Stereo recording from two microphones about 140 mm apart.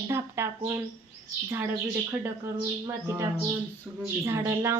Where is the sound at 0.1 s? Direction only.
20° right (ahead or behind).